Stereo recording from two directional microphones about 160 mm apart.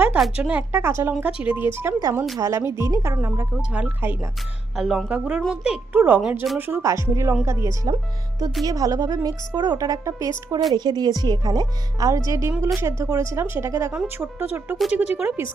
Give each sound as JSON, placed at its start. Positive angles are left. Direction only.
{"t": 0.0, "sound": "speech", "side_deg": -10}
{"t": 6.6, "sound": "speech", "side_deg": -15}